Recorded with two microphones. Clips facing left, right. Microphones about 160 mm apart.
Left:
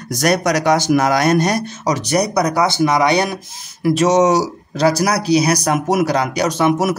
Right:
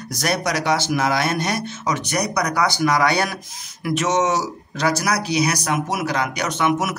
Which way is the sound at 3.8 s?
35° left (ahead or behind).